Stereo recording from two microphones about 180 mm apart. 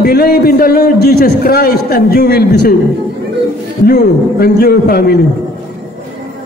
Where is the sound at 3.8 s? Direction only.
60° left (ahead or behind).